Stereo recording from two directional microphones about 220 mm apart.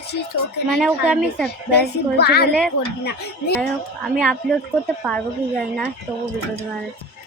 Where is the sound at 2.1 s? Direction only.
45° left (ahead or behind).